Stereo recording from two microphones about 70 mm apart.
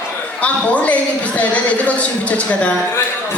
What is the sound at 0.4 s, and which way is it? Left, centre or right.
A man's voice, centre.